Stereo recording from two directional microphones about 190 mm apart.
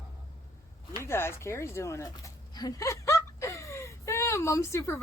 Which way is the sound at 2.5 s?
20° left (ahead or behind).